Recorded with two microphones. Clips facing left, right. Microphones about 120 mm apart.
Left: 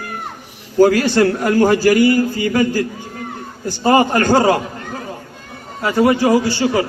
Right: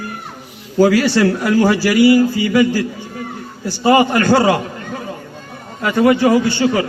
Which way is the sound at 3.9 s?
45° left (ahead or behind).